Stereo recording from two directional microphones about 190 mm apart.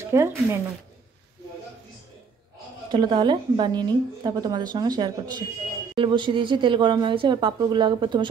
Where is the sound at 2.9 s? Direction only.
25° right (ahead or behind).